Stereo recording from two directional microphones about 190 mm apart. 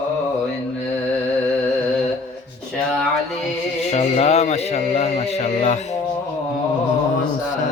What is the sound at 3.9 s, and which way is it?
Speech, 35° left (ahead or behind).